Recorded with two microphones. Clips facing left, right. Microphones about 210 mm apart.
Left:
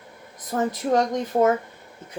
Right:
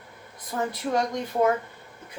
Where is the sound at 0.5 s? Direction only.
50° left (ahead or behind).